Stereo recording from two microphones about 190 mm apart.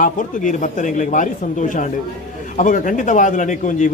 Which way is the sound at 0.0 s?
40° left (ahead or behind).